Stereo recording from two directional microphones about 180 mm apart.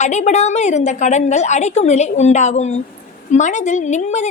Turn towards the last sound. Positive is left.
turn(degrees=40)  # may be behind; listen again after turning